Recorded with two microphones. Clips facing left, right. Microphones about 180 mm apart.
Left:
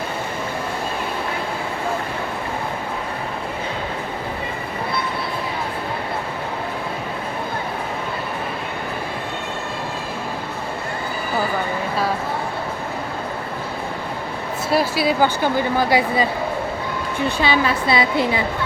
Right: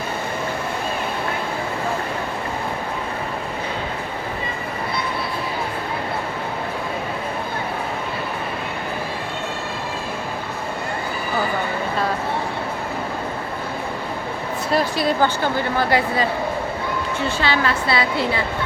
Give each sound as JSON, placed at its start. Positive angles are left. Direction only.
{"t": 14.7, "sound": "a woman's voice", "side_deg": 5}